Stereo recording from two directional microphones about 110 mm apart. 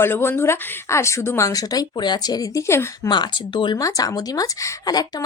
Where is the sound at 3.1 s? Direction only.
45° left (ahead or behind).